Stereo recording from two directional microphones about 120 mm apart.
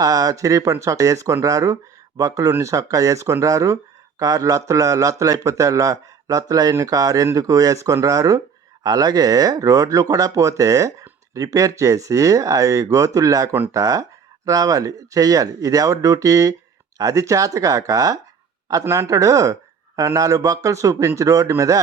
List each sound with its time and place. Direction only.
0.0 s speech: 30° right (ahead or behind)